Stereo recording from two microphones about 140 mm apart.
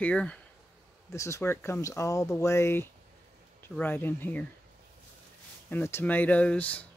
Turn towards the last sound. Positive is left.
turn(degrees=10)  # may be behind; listen again after turning